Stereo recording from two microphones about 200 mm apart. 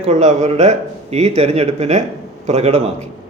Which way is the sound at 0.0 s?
35° right (ahead or behind).